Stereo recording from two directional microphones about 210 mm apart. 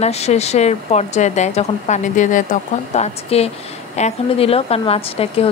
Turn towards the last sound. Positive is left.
turn(degrees=25)  # may be behind; listen again after turning